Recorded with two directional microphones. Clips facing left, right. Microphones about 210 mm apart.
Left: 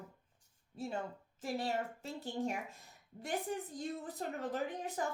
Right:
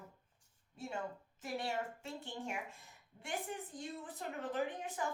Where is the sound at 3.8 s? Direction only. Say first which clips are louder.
Left 5 dB; 40° left (ahead or behind).